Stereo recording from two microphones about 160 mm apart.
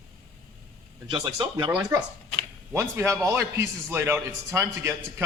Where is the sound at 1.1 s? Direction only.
30° right (ahead or behind).